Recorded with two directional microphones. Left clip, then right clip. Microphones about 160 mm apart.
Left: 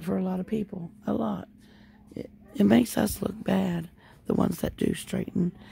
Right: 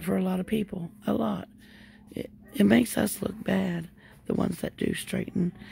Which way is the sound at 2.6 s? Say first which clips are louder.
Even; 10° left (ahead or behind).